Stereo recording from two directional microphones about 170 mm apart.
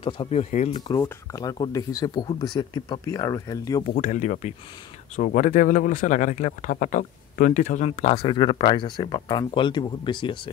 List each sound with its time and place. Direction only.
0.0 s speech: 35° left (ahead or behind)
0.7 s speech: 25° left (ahead or behind)
3.9 s speech: 50° left (ahead or behind); by 10.5 s 30° left (ahead or behind)